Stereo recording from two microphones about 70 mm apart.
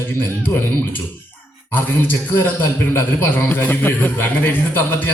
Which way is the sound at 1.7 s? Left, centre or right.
Left.